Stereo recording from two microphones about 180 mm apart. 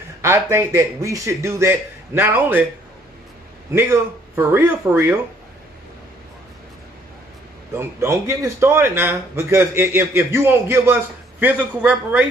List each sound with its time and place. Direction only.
0.2 s speech: 15° right (ahead or behind)
3.7 s speech: 15° right (ahead or behind)
7.7 s speech: 15° right (ahead or behind)